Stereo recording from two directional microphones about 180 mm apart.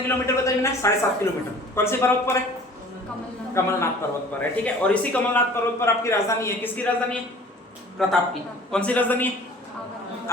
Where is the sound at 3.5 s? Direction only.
15° left (ahead or behind).